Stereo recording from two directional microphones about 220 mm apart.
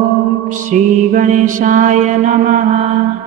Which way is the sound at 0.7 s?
35° right (ahead or behind).